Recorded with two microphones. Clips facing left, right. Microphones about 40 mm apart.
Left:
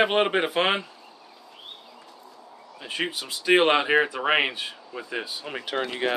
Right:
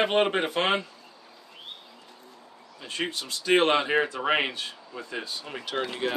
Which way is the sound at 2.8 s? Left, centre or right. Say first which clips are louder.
Left 2 dB; centre.